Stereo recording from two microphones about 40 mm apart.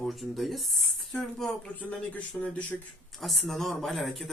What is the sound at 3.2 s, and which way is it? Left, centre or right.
Speech, centre.